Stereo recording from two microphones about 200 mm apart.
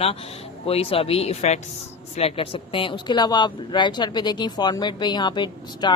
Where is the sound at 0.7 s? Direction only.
30° left (ahead or behind).